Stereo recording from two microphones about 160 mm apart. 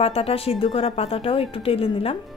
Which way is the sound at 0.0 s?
35° left (ahead or behind).